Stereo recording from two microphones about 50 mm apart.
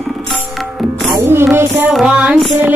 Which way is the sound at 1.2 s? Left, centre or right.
Right.